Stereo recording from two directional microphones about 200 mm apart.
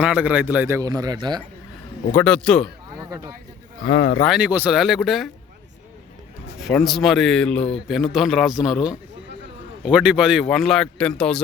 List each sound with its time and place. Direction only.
0.0 s a man's voice: 5° right (ahead or behind)
2.1 s a man's voice: 5° left (ahead or behind)
3.1 s speech: 20° right (ahead or behind)
3.8 s speech: 65° left (ahead or behind)
4.3 s a man's voice: 5° right (ahead or behind)
6.6 s a man's voice: centre (ahead or behind)